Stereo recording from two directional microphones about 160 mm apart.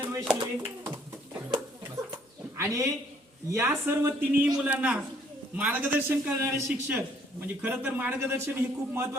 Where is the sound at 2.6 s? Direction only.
20° right (ahead or behind).